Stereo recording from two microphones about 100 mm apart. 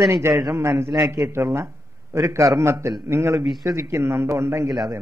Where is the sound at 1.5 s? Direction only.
25° right (ahead or behind).